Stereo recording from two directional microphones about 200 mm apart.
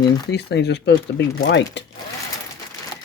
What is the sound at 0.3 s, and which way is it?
Speech, 55° left (ahead or behind).